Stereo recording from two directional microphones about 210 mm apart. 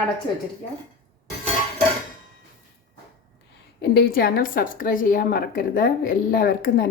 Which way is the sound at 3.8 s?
50° left (ahead or behind).